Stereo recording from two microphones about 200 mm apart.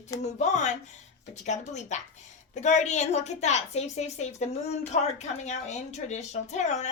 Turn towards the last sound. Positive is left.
turn(degrees=35)  # may be behind; listen again after turning